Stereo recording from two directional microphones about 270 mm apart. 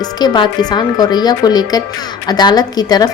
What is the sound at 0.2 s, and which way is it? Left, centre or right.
A woman's voice, centre.